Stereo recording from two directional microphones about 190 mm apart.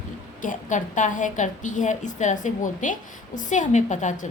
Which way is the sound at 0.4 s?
40° left (ahead or behind).